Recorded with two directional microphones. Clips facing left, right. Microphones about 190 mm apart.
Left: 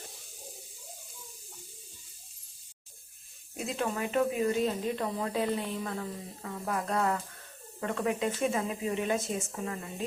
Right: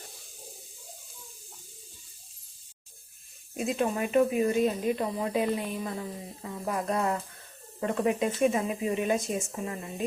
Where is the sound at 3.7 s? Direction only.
20° right (ahead or behind).